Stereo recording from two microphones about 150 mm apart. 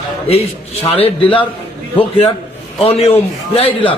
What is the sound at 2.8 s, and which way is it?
A man's voice, 45° left (ahead or behind).